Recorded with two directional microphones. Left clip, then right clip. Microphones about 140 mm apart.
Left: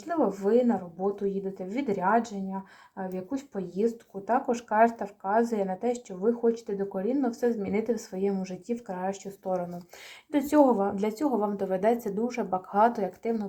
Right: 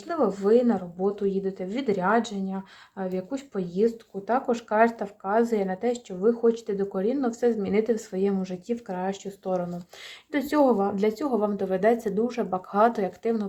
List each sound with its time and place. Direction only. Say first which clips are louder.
0.1 s speech: right 3 dB; 20° right (ahead or behind)
3.8 s speech: even; 20° right (ahead or behind)
10.3 s a woman's voice: even; 10° right (ahead or behind)